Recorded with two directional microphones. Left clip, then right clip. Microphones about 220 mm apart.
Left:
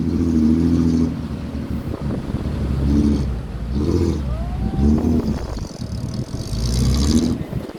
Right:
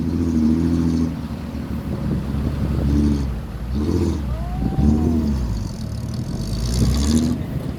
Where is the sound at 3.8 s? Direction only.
15° right (ahead or behind).